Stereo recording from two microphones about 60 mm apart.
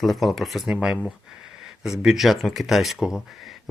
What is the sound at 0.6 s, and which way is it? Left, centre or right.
Speech, centre.